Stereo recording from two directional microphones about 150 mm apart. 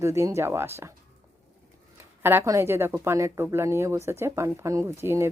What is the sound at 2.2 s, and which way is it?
Speech, 15° right (ahead or behind).